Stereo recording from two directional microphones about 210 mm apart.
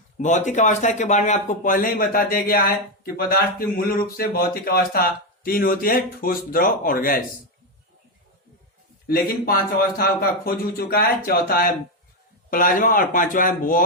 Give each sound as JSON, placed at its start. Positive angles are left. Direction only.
{"t": 0.2, "sound": "speech", "side_deg": 35}
{"t": 9.0, "sound": "speech", "side_deg": 45}